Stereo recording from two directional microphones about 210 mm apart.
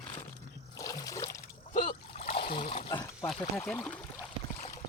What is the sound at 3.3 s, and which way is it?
Speech, 5° left (ahead or behind).